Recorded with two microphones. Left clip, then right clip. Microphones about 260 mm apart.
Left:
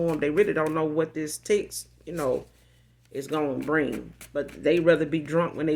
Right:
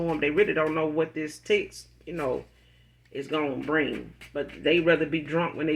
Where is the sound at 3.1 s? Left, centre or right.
Left.